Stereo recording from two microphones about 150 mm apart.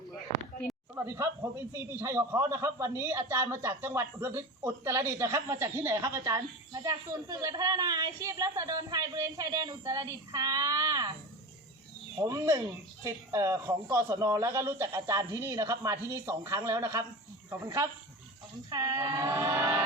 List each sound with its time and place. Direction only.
0.9 s a man's voice: 20° right (ahead or behind)
12.1 s a man's voice: 20° right (ahead or behind)